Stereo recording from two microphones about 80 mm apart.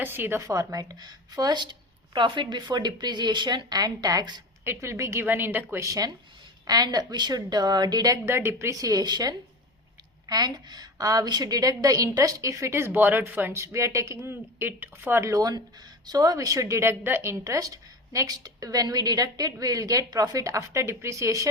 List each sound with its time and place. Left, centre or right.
0.0 s speech: right
0.4 s a woman's voice: right
2.1 s a woman's voice: right
4.6 s a woman's voice: right
5.2 s speech: right
5.8 s a woman's voice: right
6.7 s a woman's voice: right
8.2 s a woman's voice: right
8.8 s a woman's voice: right
15.3 s a woman's voice: right
17.4 s a woman's voice: right